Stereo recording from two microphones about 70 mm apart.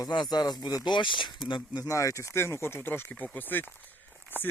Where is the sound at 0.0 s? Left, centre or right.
Left.